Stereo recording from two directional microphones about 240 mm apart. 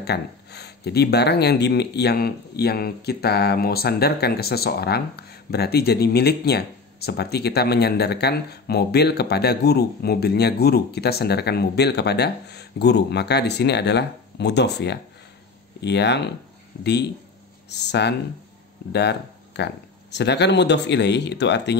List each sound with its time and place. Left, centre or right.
0.0 s speech: left